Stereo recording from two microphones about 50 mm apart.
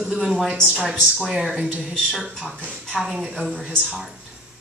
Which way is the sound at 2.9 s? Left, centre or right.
Centre.